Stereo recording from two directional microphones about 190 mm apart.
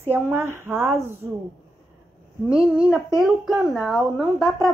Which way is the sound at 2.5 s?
5° right (ahead or behind).